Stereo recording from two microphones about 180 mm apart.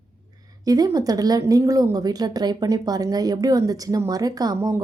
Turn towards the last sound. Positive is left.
turn(degrees=-15)  # may be behind; listen again after turning